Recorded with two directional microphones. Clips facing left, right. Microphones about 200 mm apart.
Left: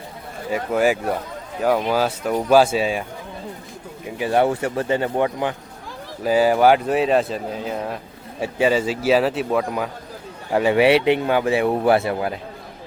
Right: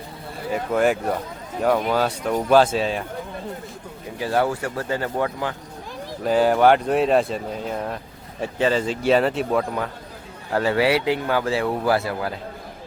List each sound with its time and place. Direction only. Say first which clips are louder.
0.5 s speech: left 1 dB; 10° left (ahead or behind)
4.2 s speech: left 3 dB; 20° left (ahead or behind)
6.2 s speech: left 1 dB; 5° left (ahead or behind); by 12.3 s 25° left (ahead or behind)